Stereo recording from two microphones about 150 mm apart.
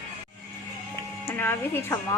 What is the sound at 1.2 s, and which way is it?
Speech, 15° left (ahead or behind).